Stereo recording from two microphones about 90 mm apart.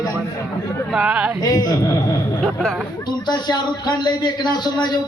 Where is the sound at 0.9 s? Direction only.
10° right (ahead or behind).